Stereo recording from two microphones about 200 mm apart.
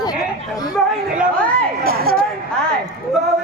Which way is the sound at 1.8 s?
50° right (ahead or behind).